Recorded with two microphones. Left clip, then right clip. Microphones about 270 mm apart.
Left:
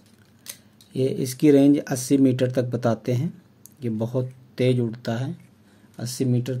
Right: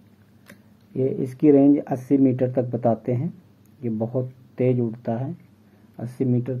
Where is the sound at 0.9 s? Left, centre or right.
Left.